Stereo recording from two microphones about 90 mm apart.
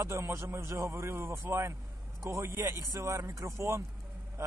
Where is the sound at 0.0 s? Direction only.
35° right (ahead or behind).